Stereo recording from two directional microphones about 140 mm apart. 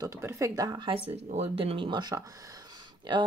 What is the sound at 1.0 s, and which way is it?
Speech, 50° right (ahead or behind).